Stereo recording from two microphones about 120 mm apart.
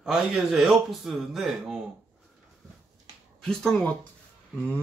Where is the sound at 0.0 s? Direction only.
5° right (ahead or behind).